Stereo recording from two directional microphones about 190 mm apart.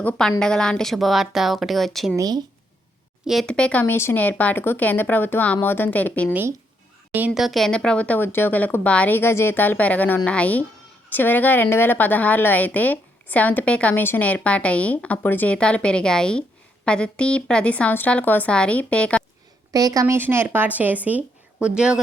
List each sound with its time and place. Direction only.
0.0 s a woman's voice: 5° left (ahead or behind)
2.1 s speech: 20° right (ahead or behind)
3.2 s a woman's voice: centre (ahead or behind)
7.1 s a woman's voice: 5° right (ahead or behind)
19.7 s a woman's voice: 20° right (ahead or behind)